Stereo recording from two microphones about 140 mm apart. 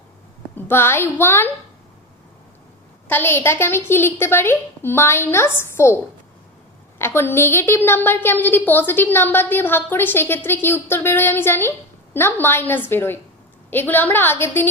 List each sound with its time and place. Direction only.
0.5 s a woman's voice: 15° left (ahead or behind)
3.1 s a woman's voice: 15° left (ahead or behind)
7.0 s a woman's voice: 15° left (ahead or behind)